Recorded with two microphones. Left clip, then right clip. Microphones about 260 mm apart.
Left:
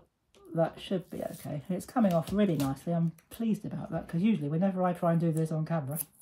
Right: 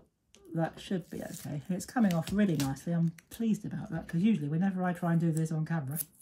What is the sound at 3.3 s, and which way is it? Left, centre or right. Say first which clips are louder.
Speech: even; centre.